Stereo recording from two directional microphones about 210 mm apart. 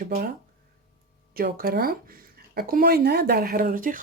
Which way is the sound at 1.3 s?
45° right (ahead or behind).